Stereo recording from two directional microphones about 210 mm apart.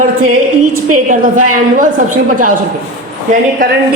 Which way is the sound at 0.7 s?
90° right.